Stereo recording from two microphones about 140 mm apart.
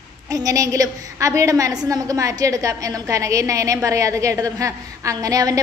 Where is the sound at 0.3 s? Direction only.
25° right (ahead or behind).